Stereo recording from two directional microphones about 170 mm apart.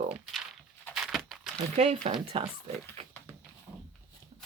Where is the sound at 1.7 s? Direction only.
40° right (ahead or behind).